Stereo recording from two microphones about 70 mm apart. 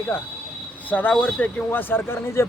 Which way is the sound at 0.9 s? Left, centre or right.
Left.